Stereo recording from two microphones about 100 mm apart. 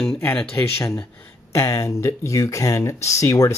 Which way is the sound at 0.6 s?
30° left (ahead or behind).